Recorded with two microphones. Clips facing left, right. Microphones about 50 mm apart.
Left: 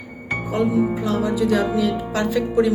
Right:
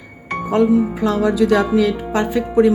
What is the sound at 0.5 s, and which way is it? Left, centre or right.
Speech, right.